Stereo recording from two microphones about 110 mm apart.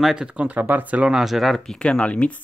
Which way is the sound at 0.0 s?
5° right (ahead or behind).